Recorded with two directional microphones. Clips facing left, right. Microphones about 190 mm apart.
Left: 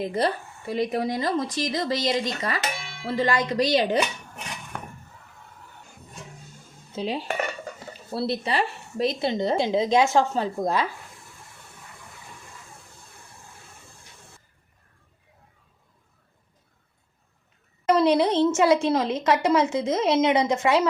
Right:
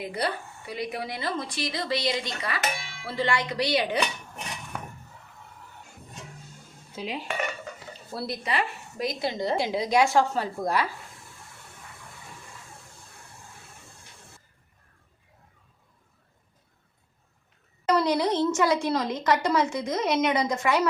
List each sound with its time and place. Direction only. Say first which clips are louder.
0.0 s speech: left 5 dB; 40° left (ahead or behind)
6.9 s dishes: left 4 dB; 30° left (ahead or behind)
8.1 s a woman's voice: left 4 dB; 25° left (ahead or behind)
17.8 s a woman's voice: left 4 dB; 25° left (ahead or behind)